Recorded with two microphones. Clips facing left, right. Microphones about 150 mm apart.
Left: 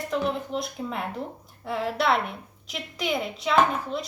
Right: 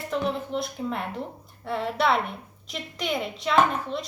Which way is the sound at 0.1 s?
Centre (ahead or behind).